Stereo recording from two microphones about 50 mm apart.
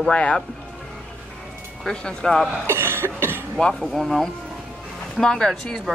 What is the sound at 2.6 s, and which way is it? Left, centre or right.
Cough, right.